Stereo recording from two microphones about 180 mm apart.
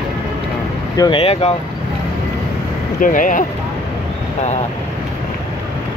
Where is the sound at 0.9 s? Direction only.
20° left (ahead or behind).